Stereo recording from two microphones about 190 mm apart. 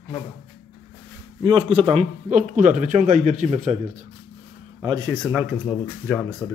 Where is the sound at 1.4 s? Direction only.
25° right (ahead or behind).